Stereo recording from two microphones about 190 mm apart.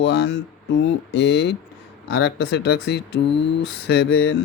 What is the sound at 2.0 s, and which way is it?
Speech, 80° left.